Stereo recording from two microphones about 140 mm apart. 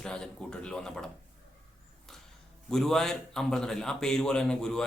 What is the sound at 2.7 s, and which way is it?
Speech, 5° left (ahead or behind).